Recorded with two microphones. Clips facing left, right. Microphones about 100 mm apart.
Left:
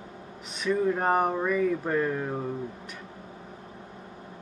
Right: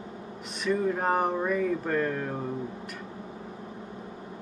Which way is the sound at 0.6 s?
Centre (ahead or behind).